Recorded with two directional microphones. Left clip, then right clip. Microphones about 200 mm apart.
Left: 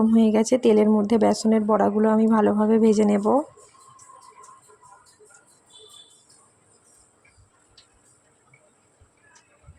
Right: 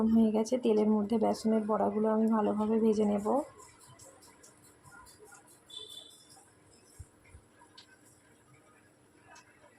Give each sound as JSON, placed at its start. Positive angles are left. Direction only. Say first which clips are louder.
{"t": 0.0, "sound": "speech", "louder": "left 9 dB", "side_deg": 45}